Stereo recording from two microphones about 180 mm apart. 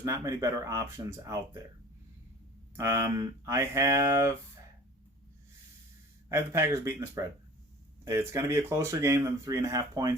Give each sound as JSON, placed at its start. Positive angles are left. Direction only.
{"t": 0.0, "sound": "speech", "side_deg": -15}
{"t": 2.7, "sound": "speech", "side_deg": -15}
{"t": 6.2, "sound": "speech", "side_deg": -15}